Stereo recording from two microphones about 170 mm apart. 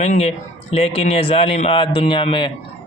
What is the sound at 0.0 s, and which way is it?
A man's voice, 40° left (ahead or behind).